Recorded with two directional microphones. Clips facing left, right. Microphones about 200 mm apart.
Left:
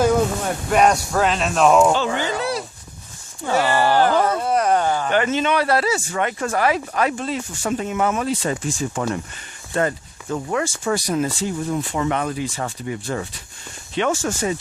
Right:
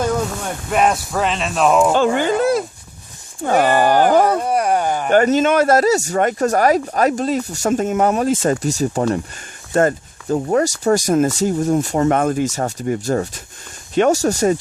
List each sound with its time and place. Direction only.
0.0 s speech: 5° left (ahead or behind)
1.9 s speech: 50° right (ahead or behind)
4.4 s a sound: 10° right (ahead or behind)
5.0 s speech: 45° right (ahead or behind)